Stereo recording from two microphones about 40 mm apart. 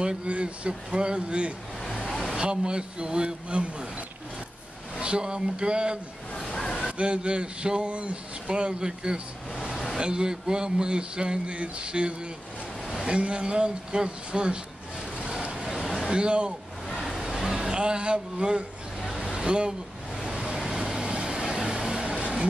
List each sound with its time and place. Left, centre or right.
0.0 s speech: right
4.9 s speech: right
7.0 s speech: right
15.1 s vehicle: right
15.5 s a sound: centre
16.0 s speech: right
17.2 s vehicle: centre
17.6 s speech: right
18.9 s a sound: centre
20.2 s vehicle: centre